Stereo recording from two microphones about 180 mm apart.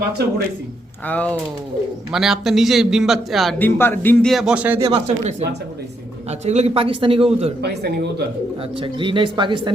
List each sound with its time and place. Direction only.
1.0 s a man's voice: 5° left (ahead or behind)
3.6 s speech: 10° left (ahead or behind)
4.3 s a man's voice: 5° right (ahead or behind)
4.8 s a man's voice: 35° right (ahead or behind)
6.4 s a man's voice: 40° right (ahead or behind)
7.6 s speech: 65° right (ahead or behind)
8.8 s speech: 30° right (ahead or behind)